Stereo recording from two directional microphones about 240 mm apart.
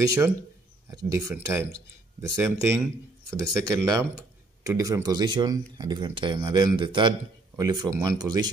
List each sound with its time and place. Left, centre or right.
0.0 s speech: centre